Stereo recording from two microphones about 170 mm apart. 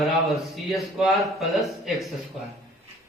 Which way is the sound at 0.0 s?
Centre (ahead or behind).